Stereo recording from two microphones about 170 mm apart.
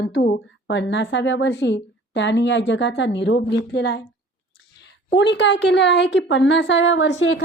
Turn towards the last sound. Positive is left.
turn(degrees=90)